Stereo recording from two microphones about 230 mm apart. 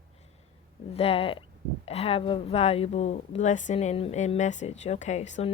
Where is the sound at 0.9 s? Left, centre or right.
Left.